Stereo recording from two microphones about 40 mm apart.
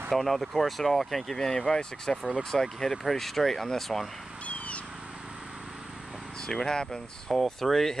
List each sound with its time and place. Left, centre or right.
0.1 s speech: centre
4.5 s a sound: left
6.4 s speech: centre